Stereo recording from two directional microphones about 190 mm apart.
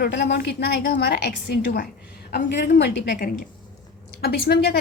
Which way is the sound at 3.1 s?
45° left (ahead or behind).